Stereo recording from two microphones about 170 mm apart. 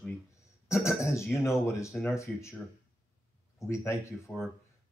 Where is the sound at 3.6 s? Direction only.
15° left (ahead or behind).